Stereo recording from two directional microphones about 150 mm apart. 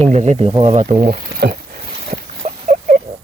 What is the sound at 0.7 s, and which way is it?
Speech, 55° right (ahead or behind).